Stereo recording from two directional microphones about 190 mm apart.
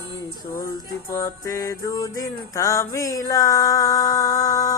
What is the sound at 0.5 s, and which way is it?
Music, 20° left (ahead or behind).